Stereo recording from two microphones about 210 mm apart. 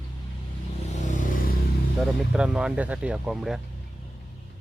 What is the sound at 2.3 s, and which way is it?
Speech, 5° right (ahead or behind).